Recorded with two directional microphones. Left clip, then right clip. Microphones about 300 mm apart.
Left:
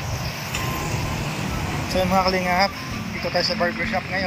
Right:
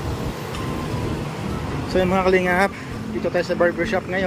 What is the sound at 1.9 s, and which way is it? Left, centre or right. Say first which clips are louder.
Speech: right 2 dB; centre.